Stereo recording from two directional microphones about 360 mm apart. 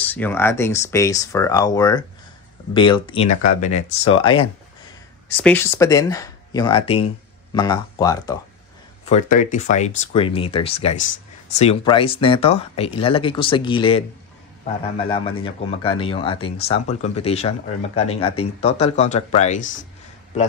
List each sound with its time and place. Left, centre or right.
0.0 s a man's voice: centre
9.1 s a man's voice: left